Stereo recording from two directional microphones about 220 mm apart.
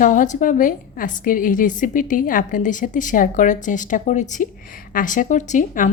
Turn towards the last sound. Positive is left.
turn(degrees=35)  # may be behind; listen again after turning